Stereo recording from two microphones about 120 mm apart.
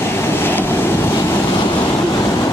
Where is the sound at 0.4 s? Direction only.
15° left (ahead or behind).